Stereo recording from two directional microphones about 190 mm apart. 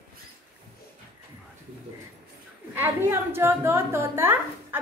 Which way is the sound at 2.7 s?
15° right (ahead or behind).